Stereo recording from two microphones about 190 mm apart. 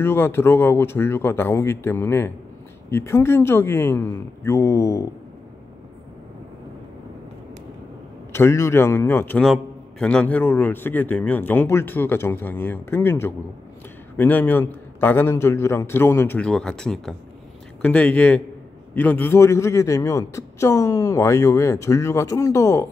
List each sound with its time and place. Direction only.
0.0 s a man's voice: 10° left (ahead or behind)
8.3 s a man's voice: 15° left (ahead or behind)